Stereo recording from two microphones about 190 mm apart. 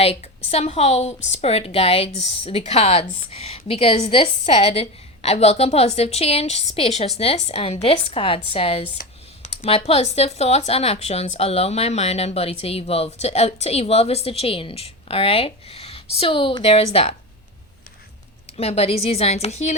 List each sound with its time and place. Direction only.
0.0 s a woman's voice: 35° left (ahead or behind)
18.5 s speech: 30° left (ahead or behind)